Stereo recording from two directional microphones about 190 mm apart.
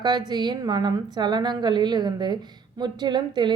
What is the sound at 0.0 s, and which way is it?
A woman's voice, 20° right (ahead or behind).